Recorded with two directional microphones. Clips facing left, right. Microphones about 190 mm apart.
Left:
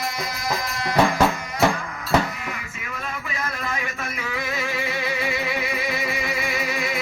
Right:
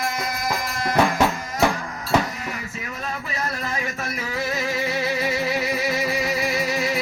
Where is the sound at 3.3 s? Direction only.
35° right (ahead or behind).